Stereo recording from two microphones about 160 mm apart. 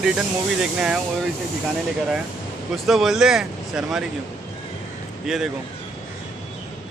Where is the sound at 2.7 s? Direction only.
Centre (ahead or behind).